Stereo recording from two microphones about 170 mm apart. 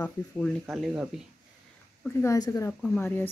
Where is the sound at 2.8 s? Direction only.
10° left (ahead or behind).